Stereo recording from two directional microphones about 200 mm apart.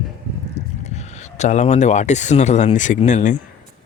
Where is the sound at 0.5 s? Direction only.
35° left (ahead or behind).